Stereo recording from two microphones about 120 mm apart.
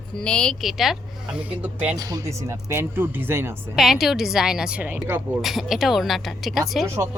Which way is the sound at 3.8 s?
Centre (ahead or behind).